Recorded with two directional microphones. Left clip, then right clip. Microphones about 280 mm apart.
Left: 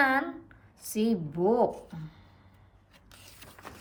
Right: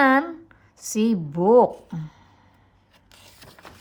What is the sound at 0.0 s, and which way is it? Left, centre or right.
A woman's voice, right.